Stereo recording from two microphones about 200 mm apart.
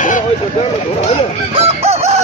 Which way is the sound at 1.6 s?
30° right (ahead or behind).